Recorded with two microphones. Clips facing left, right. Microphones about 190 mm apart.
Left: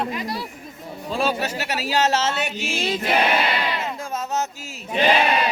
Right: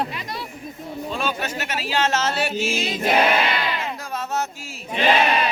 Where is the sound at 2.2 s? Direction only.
25° left (ahead or behind).